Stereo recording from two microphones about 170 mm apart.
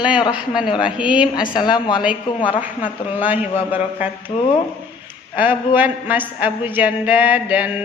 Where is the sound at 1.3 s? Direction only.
25° left (ahead or behind).